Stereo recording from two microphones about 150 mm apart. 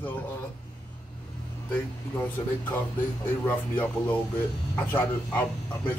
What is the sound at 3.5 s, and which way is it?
Speech, 10° left (ahead or behind).